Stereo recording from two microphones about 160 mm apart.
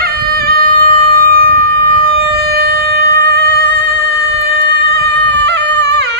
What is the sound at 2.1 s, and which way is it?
Music, 85° right.